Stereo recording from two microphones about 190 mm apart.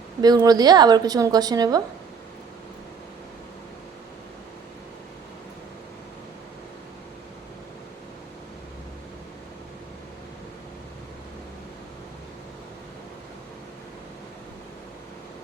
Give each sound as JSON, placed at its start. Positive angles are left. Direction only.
{"t": 0.2, "sound": "a woman's voice", "side_deg": -20}